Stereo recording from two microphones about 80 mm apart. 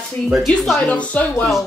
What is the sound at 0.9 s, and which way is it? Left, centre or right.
Speech, centre.